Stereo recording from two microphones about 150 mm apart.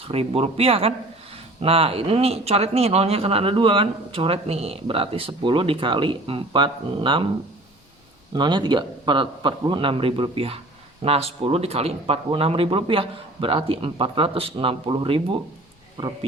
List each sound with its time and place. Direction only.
0.0 s speech: 40° right (ahead or behind)
8.3 s speech: 30° right (ahead or behind)